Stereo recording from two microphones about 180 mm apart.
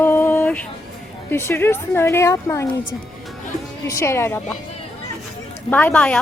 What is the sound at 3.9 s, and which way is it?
Speech, 15° left (ahead or behind).